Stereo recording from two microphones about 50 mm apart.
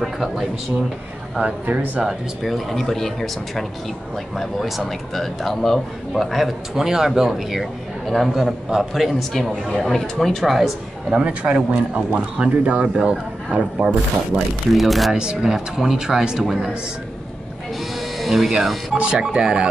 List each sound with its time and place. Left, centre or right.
0.0 s a man's voice: centre
1.4 s speech: right
2.0 s a man's voice: centre
9.3 s a man's voice: centre
11.1 s speech: right
14.7 s a man's voice: centre
15.1 s speech: centre
18.1 s a sound: centre
18.5 s a man's voice: centre
18.9 s speech: centre